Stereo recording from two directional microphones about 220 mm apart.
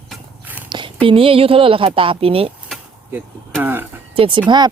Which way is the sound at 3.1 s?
10° right (ahead or behind).